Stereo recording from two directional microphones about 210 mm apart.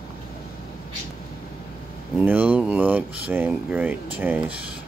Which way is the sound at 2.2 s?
10° right (ahead or behind).